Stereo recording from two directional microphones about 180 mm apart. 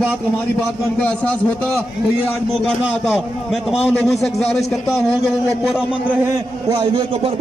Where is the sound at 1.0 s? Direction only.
5° left (ahead or behind).